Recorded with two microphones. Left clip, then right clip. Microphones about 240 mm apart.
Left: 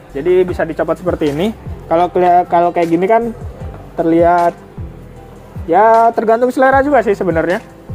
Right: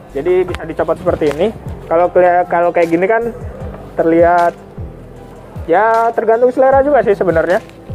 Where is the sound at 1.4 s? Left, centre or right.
Left.